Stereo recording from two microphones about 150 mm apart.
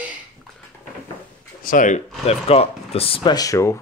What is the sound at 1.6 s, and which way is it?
Speech, 65° left (ahead or behind).